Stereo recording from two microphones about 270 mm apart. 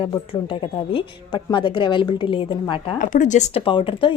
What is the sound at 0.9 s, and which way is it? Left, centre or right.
A woman's voice, centre.